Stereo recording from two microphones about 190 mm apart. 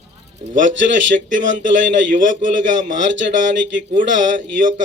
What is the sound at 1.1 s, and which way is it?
A man's voice, 45° right (ahead or behind).